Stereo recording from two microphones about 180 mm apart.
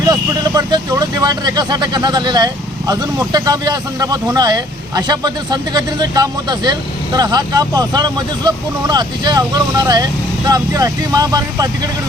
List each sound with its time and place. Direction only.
0.1 s speech: 20° right (ahead or behind)